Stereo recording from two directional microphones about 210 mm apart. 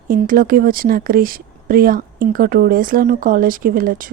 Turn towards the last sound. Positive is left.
turn(degrees=-40)  # may be behind; listen again after turning